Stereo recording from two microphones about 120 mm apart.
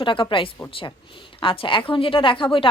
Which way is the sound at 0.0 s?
45° left (ahead or behind).